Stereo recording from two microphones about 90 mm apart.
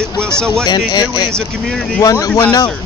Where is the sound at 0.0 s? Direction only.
30° right (ahead or behind).